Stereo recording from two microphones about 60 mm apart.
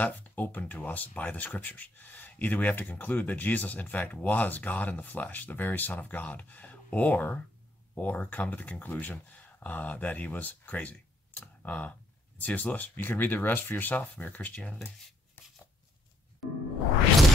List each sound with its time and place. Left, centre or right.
0.0 s speech: left